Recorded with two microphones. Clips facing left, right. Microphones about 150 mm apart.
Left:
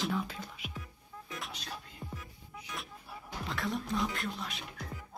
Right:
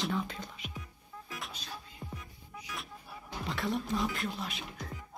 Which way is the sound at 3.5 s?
Centre (ahead or behind).